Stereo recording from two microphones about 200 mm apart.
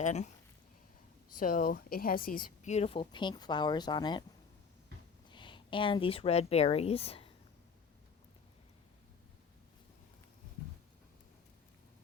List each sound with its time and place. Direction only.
0.0 s speech: 35° left (ahead or behind)
1.4 s a woman's voice: 45° left (ahead or behind); by 4.2 s 20° left (ahead or behind)
5.3 s speech: 25° left (ahead or behind)